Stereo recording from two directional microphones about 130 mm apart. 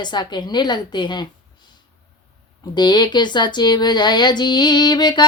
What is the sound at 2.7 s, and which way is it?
Speech, 35° left (ahead or behind).